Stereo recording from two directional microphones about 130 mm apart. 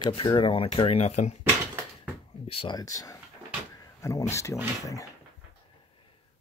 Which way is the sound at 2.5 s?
45° left (ahead or behind).